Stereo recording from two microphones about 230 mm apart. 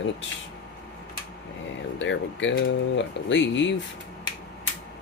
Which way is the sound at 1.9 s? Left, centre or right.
Left.